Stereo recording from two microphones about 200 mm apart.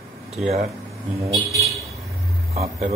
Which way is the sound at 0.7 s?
15° right (ahead or behind).